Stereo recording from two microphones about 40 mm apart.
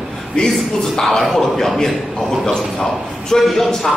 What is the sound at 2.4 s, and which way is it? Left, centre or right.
A man's voice, centre.